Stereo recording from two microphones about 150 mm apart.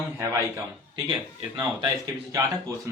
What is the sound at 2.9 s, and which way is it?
Speech, 20° right (ahead or behind).